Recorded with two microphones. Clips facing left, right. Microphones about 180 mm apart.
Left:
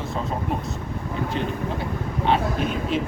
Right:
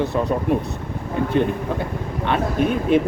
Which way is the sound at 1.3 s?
55° right (ahead or behind).